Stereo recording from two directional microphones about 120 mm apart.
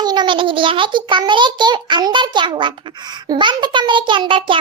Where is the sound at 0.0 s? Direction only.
35° right (ahead or behind).